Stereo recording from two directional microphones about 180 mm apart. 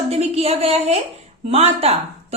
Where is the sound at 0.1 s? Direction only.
35° right (ahead or behind).